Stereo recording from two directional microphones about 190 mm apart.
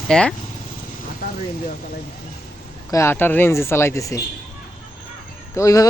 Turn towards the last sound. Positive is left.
turn(degrees=15)  # may be behind; listen again after turning